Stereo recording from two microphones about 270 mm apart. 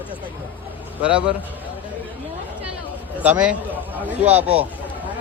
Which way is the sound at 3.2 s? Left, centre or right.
Centre.